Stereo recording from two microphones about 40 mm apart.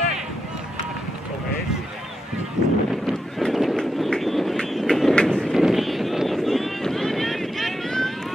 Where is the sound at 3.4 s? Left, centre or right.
Centre.